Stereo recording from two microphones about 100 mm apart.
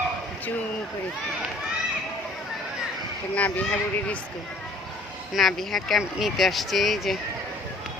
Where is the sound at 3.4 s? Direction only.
15° left (ahead or behind).